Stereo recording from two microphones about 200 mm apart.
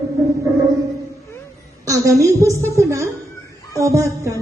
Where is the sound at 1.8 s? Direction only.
15° right (ahead or behind).